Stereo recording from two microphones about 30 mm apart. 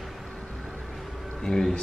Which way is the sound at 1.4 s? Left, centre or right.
Centre.